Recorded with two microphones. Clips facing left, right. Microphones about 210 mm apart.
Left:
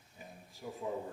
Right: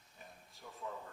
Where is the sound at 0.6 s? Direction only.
30° left (ahead or behind).